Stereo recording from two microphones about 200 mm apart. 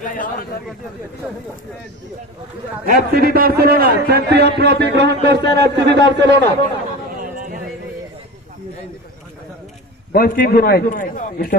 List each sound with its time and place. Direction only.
0.0 s a man's voice: 45° left (ahead or behind)
2.8 s a man's voice: 50° right (ahead or behind)
7.2 s a sound: 45° right (ahead or behind)
10.1 s a man's voice: 50° left (ahead or behind)